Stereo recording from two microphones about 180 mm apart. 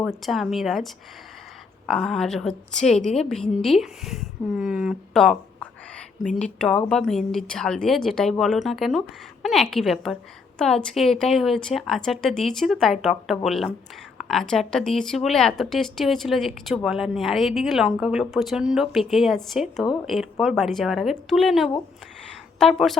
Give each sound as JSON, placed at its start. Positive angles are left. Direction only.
{"t": 0.0, "sound": "speech", "side_deg": 0}
{"t": 1.9, "sound": "a woman's voice", "side_deg": 0}